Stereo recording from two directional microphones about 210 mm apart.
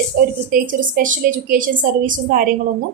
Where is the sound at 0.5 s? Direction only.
40° right (ahead or behind).